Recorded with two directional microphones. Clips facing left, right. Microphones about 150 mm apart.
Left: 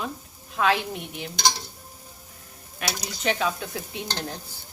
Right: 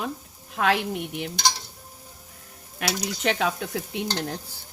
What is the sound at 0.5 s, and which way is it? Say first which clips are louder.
Speech: even; 60° right (ahead or behind).